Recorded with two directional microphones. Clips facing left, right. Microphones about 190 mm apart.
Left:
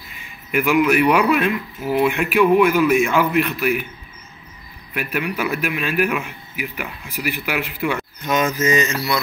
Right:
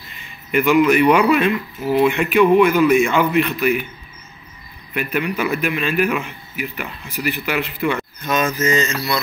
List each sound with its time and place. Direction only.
0.1 s speech: 5° left (ahead or behind)
4.9 s a man's voice: 5° left (ahead or behind)